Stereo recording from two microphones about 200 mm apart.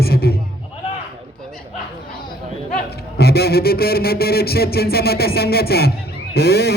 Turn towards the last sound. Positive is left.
turn(degrees=55)  # may be behind; listen again after turning